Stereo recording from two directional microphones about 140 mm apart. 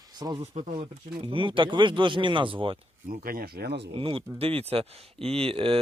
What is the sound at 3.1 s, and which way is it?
Speech, 90° right.